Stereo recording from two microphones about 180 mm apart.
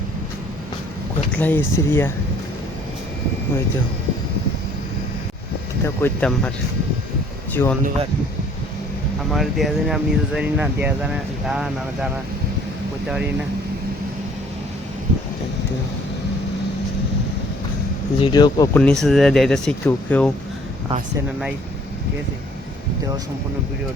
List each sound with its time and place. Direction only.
1.4 s speech: 10° left (ahead or behind)
5.8 s speech: 10° left (ahead or behind)
7.5 s speech: 10° left (ahead or behind)
9.3 s speech: centre (ahead or behind)
18.2 s speech: 25° left (ahead or behind)
18.7 s speech: 5° left (ahead or behind)